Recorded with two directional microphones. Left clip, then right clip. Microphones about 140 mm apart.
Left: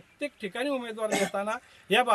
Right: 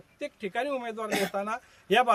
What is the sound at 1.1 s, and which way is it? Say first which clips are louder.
Speech: left 1 dB; 90° left.